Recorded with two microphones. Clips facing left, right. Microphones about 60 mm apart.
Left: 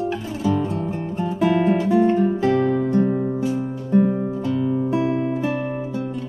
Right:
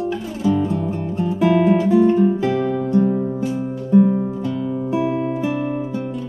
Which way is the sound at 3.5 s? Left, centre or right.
Centre.